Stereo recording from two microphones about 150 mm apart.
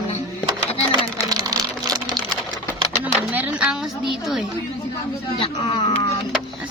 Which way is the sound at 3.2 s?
10° right (ahead or behind).